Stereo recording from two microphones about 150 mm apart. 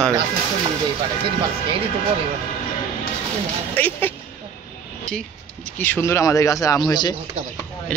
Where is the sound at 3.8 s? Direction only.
10° left (ahead or behind).